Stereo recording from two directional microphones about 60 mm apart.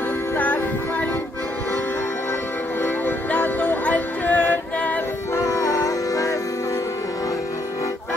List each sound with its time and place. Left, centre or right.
0.4 s music: left
2.8 s music: left
5.3 s music: left